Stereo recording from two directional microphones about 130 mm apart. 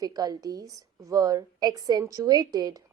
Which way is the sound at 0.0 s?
30° right (ahead or behind).